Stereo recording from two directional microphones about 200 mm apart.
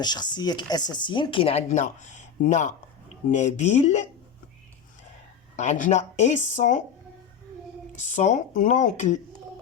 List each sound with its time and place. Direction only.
0.0 s speech: 20° left (ahead or behind)
5.5 s speech: 35° left (ahead or behind)
7.9 s speech: 35° left (ahead or behind)